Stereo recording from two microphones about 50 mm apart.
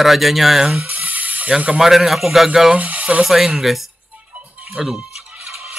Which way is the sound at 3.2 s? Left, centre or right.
Centre.